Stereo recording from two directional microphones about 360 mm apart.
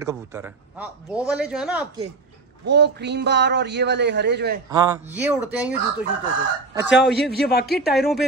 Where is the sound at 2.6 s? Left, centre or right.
Right.